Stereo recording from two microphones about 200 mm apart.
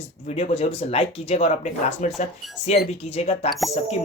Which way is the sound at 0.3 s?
30° left (ahead or behind).